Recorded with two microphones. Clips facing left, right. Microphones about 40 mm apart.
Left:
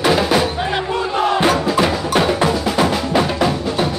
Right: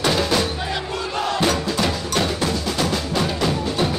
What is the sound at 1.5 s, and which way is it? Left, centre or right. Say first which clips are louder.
Wood block: left 6 dB; centre.